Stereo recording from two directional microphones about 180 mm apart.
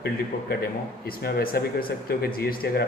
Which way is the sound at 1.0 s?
55° left (ahead or behind).